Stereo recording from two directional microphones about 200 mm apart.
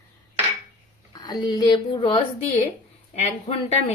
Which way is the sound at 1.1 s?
20° left (ahead or behind).